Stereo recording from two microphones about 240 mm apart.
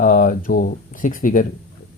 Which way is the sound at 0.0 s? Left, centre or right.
Left.